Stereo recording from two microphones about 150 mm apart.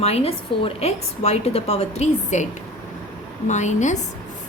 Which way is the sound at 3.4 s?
50° left (ahead or behind).